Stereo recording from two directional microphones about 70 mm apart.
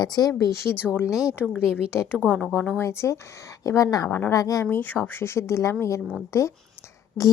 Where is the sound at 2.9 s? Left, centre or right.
Left.